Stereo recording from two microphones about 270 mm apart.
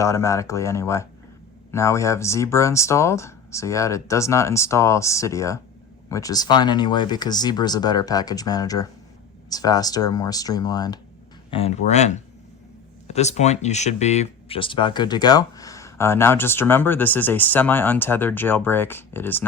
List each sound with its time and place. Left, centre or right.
0.0 s speech: centre